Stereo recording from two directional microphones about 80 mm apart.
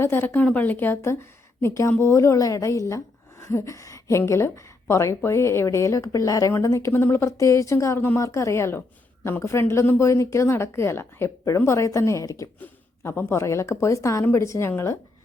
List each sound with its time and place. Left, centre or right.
0.0 s a woman's voice: left
12.5 s a woman's voice: left